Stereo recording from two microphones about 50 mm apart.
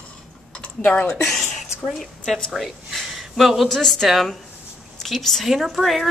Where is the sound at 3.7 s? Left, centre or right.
Centre.